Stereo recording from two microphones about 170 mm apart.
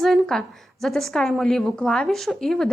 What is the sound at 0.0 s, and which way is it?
Speech, centre (ahead or behind).